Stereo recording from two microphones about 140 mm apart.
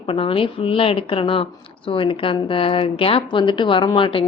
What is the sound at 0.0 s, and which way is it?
A woman's voice, 40° left (ahead or behind).